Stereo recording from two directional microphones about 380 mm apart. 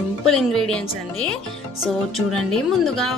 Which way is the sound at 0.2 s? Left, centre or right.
Centre.